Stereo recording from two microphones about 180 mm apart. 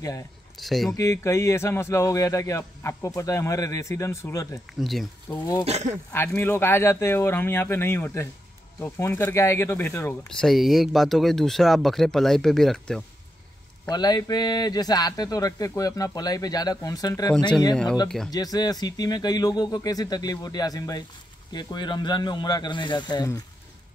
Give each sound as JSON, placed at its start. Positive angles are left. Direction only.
{"t": 0.6, "sound": "speech", "side_deg": 0}
{"t": 0.9, "sound": "a man's voice", "side_deg": 15}
{"t": 4.7, "sound": "speech", "side_deg": 0}
{"t": 5.3, "sound": "a man's voice", "side_deg": 20}
{"t": 10.4, "sound": "speech", "side_deg": 0}
{"t": 13.8, "sound": "speech", "side_deg": 20}
{"t": 18.0, "sound": "speech", "side_deg": 5}
{"t": 18.3, "sound": "speech", "side_deg": 20}